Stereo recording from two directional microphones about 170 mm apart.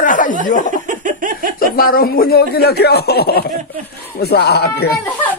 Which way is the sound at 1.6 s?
60° left (ahead or behind).